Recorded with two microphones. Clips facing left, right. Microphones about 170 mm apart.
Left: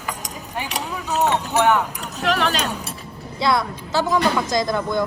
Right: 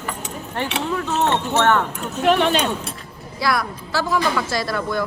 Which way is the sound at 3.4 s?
20° left (ahead or behind).